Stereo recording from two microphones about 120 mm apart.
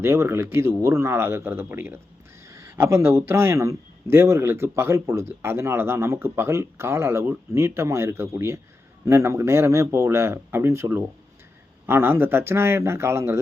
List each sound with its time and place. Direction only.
0.0 s a man's voice: 20° right (ahead or behind)